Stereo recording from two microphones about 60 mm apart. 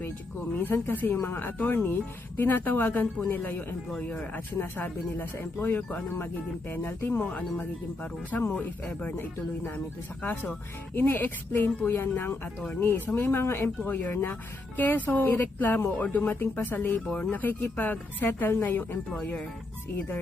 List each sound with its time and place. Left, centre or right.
0.6 s speech: left
10.9 s speech: left
17.1 s speech: centre
17.3 s speech: left